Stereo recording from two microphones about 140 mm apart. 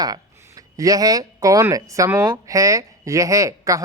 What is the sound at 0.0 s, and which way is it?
Speech, 25° right (ahead or behind).